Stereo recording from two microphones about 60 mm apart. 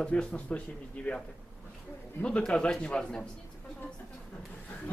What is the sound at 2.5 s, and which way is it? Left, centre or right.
Speech, centre.